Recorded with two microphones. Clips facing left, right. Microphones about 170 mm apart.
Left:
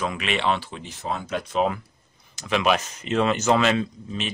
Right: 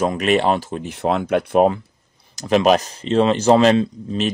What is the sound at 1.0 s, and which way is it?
Speech, 70° right (ahead or behind).